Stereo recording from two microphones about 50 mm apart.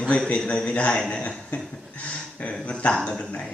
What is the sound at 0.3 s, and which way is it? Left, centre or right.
Speech, left.